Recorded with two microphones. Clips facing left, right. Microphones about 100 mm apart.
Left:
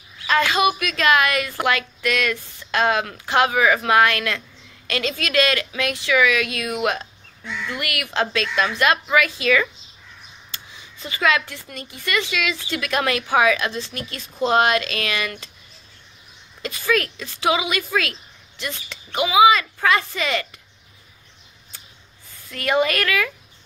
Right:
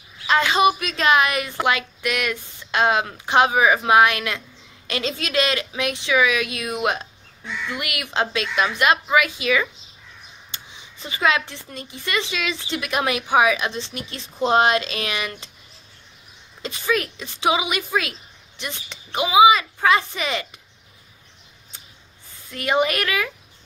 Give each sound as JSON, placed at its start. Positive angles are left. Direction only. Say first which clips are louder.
{"t": 0.3, "sound": "speech", "louder": "right 1 dB", "side_deg": -20}
{"t": 16.6, "sound": "speech", "louder": "left 1 dB", "side_deg": -20}
{"t": 22.5, "sound": "speech", "louder": "left 1 dB", "side_deg": -20}